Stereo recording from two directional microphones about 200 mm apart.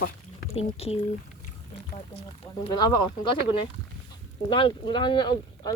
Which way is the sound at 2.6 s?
25° left (ahead or behind).